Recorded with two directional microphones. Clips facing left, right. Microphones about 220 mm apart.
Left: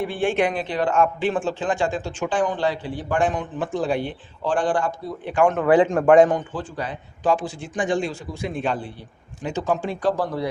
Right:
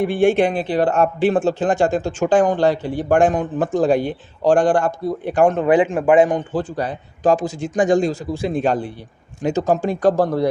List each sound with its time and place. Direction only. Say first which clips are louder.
0.2 s speech: right 7 dB; 40° right (ahead or behind)
0.4 s speech: right 5 dB; 30° right (ahead or behind)
5.6 s a man's voice: right 1 dB; 10° right (ahead or behind)
6.5 s speech: right 7 dB; 40° right (ahead or behind)